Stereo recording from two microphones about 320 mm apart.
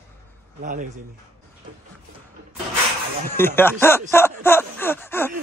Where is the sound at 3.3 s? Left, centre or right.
Centre.